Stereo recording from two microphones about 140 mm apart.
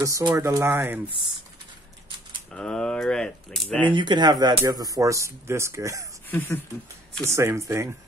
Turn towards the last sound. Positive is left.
turn(degrees=-20)  # may be behind; listen again after turning